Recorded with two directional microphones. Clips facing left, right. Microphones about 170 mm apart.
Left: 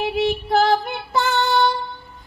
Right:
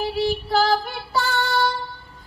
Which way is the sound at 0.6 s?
20° left (ahead or behind).